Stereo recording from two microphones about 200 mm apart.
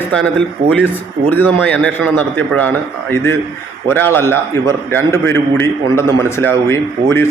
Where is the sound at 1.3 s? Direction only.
10° left (ahead or behind).